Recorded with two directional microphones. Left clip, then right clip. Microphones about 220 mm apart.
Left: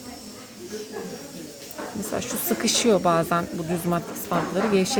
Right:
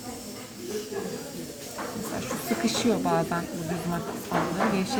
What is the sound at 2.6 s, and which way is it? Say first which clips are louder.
A woman's voice: left 7 dB; 50° left (ahead or behind).